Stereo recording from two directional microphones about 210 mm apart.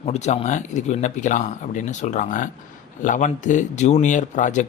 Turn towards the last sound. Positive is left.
turn(degrees=35)  # may be behind; listen again after turning